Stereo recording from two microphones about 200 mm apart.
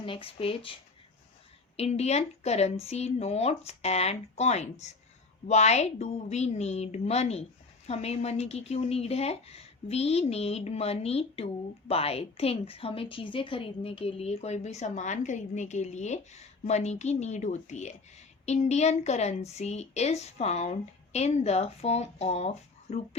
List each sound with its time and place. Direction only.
0.0 s speech: 25° left (ahead or behind)
1.7 s a woman's voice: 30° left (ahead or behind)